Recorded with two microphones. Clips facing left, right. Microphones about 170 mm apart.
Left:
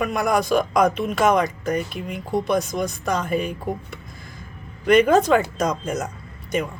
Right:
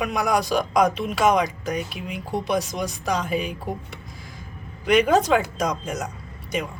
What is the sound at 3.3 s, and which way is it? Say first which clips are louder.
Speech: left 2 dB; 50° left (ahead or behind).